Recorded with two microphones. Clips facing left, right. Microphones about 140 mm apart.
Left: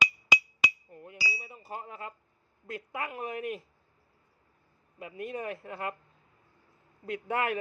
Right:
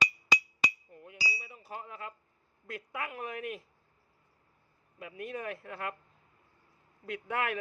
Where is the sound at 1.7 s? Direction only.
35° left (ahead or behind).